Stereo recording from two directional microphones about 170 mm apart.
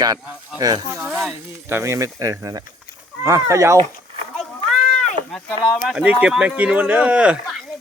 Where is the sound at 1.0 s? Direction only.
Centre (ahead or behind).